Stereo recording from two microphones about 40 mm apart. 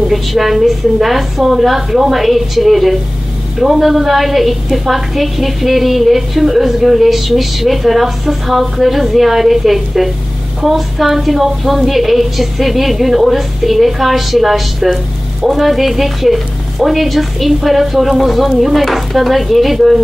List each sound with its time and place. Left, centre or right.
0.1 s a woman's voice: centre